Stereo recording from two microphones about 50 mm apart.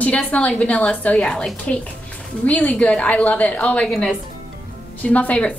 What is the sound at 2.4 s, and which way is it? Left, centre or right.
A woman's voice, left.